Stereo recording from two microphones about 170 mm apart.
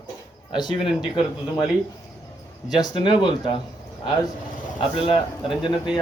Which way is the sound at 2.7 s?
25° left (ahead or behind).